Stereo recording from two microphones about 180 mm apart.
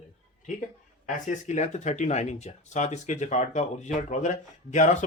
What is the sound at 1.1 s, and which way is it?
Speech, 40° left (ahead or behind).